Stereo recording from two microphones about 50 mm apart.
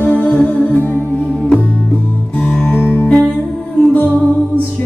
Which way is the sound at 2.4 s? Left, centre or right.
Left.